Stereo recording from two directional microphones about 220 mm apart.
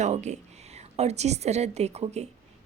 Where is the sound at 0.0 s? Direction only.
30° right (ahead or behind).